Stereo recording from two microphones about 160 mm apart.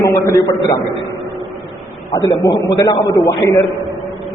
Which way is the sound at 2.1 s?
25° left (ahead or behind).